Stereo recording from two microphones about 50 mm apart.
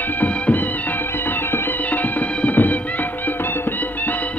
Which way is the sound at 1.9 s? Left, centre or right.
Left.